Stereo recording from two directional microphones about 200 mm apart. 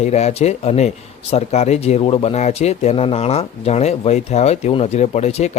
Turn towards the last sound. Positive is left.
turn(degrees=35)  # may be behind; listen again after turning